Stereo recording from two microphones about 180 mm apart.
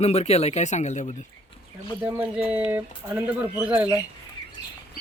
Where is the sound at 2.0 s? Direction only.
10° right (ahead or behind).